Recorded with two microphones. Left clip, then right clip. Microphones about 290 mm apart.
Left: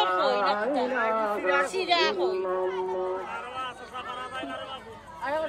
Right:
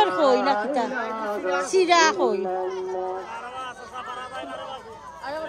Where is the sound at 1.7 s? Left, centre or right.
Right.